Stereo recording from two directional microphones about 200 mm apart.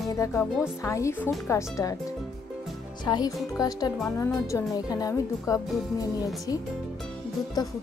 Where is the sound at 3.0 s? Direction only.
20° left (ahead or behind).